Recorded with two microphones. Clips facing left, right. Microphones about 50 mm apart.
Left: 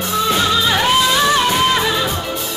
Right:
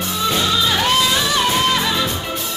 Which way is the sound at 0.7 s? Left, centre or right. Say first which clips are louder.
Left 3 dB; centre.